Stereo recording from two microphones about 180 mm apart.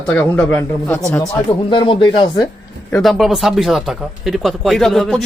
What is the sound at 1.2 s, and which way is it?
Speech, 20° left (ahead or behind).